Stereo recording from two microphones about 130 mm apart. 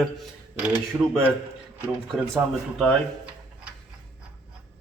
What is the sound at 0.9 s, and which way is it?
Speech, 20° right (ahead or behind).